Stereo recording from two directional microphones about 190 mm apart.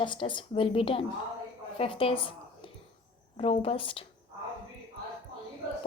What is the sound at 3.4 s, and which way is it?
Speech, 30° left (ahead or behind).